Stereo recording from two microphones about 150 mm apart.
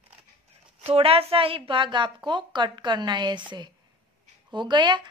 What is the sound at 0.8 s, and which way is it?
Speech, 40° right (ahead or behind).